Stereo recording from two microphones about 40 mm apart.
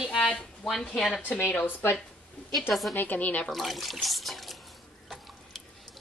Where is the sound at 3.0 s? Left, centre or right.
Left.